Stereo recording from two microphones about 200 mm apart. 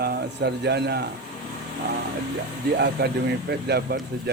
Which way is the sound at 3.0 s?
50° right (ahead or behind).